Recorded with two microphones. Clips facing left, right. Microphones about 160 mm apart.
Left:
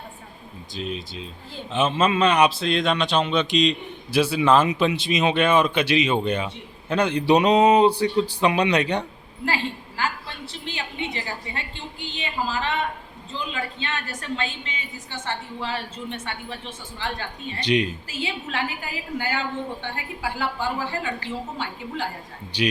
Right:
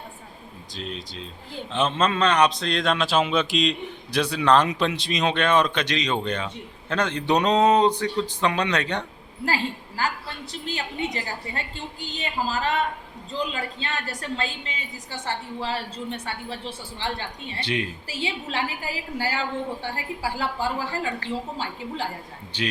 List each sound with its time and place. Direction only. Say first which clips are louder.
0.7 s a man's voice: left 4 dB; 5° left (ahead or behind)
10.5 s a sound: right 3 dB; 40° right (ahead or behind)
13.5 s a woman's voice: left 1 dB; 35° right (ahead or behind)
17.6 s a man's voice: left 6 dB; 15° left (ahead or behind)
18.1 s a woman's voice: even; 30° right (ahead or behind)
22.5 s a man's voice: left 5 dB; 15° left (ahead or behind)